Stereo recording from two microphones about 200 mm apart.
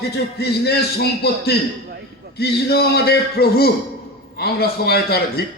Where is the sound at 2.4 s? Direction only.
55° left (ahead or behind).